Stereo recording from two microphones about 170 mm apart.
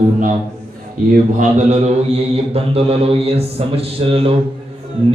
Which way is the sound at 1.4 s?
45° right (ahead or behind).